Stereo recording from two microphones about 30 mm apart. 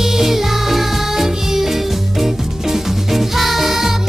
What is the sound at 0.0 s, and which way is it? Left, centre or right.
Music, centre.